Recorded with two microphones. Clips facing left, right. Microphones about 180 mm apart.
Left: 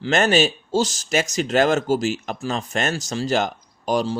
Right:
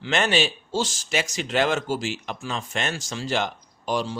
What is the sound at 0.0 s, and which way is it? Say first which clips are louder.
Speech: left 5 dB; 45° left (ahead or behind).